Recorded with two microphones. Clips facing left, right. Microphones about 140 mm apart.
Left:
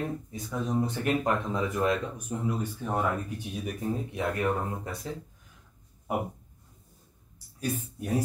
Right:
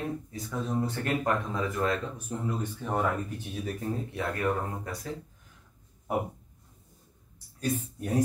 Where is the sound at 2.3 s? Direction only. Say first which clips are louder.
Left 2 dB; 5° left (ahead or behind).